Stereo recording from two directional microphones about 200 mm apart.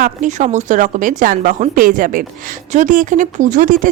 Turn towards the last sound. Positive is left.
turn(degrees=-40)  # may be behind; listen again after turning